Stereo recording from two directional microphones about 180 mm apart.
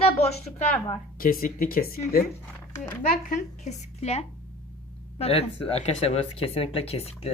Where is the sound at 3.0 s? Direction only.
45° left (ahead or behind).